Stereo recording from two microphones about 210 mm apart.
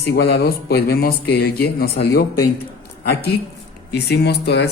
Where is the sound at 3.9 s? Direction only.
50° left (ahead or behind).